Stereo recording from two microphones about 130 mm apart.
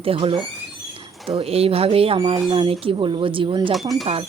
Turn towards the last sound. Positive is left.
turn(degrees=0)  # may be behind; listen again after turning